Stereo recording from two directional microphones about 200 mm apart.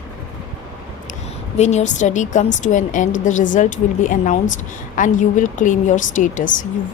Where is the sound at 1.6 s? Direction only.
35° left (ahead or behind).